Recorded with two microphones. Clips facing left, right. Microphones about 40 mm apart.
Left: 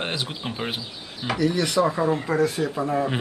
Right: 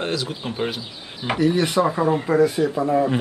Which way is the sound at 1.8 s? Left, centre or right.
Centre.